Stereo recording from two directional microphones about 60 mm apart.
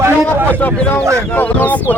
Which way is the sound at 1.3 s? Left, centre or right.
Left.